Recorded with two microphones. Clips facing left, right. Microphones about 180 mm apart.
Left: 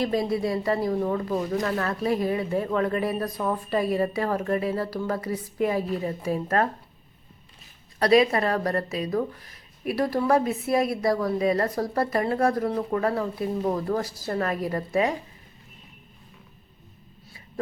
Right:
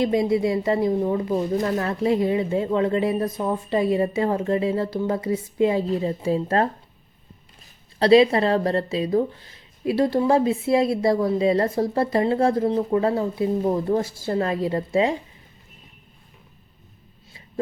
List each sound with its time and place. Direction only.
0.0 s speech: 20° right (ahead or behind)
7.9 s speech: 30° right (ahead or behind)